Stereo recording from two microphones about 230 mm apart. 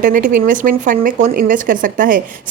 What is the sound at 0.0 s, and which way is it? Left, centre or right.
Speech, right.